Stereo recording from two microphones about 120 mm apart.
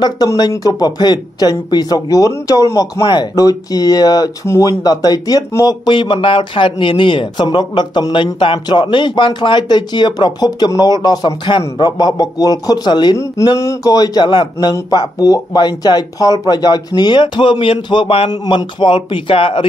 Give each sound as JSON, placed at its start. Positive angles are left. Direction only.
{"t": 0.0, "sound": "a man's voice", "side_deg": 35}
{"t": 5.9, "sound": "a man's voice", "side_deg": 40}
{"t": 13.2, "sound": "a man's voice", "side_deg": 25}